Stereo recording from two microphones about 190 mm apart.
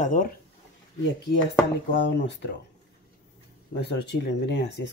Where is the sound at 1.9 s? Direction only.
65° left (ahead or behind).